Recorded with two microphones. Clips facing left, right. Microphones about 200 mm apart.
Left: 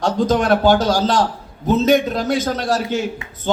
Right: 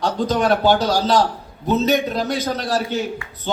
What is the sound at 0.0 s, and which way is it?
A man's voice, 45° left (ahead or behind).